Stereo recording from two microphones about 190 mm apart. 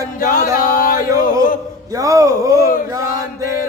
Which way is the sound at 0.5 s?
50° left (ahead or behind).